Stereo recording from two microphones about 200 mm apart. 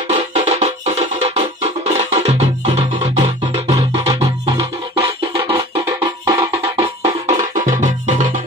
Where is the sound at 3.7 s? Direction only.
20° right (ahead or behind).